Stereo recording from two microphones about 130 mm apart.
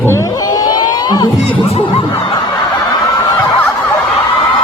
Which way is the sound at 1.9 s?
40° left (ahead or behind).